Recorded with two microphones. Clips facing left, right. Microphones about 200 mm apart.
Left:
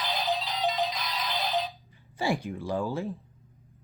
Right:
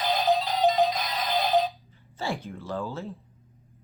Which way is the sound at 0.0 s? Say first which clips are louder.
Right 6 dB; 45° right (ahead or behind).